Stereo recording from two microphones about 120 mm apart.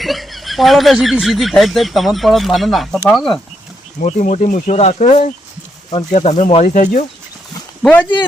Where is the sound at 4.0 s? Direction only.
85° left.